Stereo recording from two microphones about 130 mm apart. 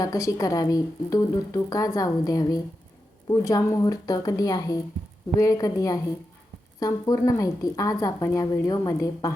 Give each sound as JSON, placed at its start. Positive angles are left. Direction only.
{"t": 0.0, "sound": "a woman's voice", "side_deg": 25}